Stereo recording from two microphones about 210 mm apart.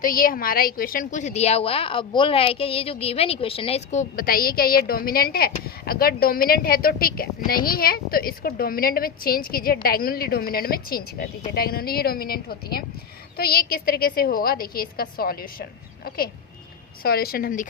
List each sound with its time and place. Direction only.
0.0 s a woman's voice: 45° left (ahead or behind)
4.2 s a woman's voice: 45° left (ahead or behind)